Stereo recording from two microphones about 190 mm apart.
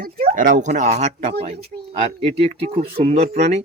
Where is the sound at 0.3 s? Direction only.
45° right (ahead or behind).